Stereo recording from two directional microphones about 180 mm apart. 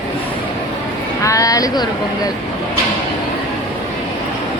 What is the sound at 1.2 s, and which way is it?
Speech, 20° left (ahead or behind).